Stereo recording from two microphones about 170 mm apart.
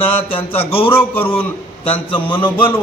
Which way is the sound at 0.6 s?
30° left (ahead or behind).